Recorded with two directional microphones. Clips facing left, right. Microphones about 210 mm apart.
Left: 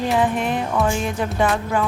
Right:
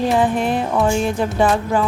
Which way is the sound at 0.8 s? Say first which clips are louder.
Right 4 dB; 30° right (ahead or behind).